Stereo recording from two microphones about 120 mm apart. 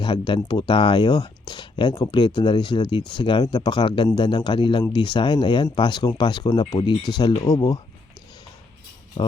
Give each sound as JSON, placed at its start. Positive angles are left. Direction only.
{"t": 0.0, "sound": "speech", "side_deg": 45}
{"t": 9.2, "sound": "music", "side_deg": 40}